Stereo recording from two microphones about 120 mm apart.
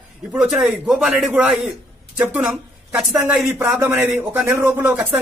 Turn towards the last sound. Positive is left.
turn(degrees=-20)  # may be behind; listen again after turning